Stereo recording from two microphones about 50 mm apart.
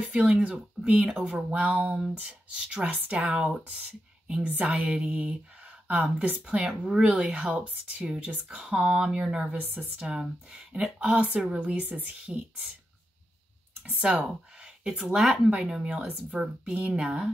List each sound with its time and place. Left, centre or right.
0.1 s speech: right
1.0 s speech: centre
1.5 s speech: right
4.9 s speech: centre
9.6 s speech: right
9.9 s speech: centre
13.8 s speech: right